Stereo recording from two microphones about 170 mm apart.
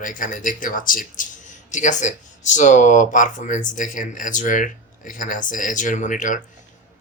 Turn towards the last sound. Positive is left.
turn(degrees=50)  # may be behind; listen again after turning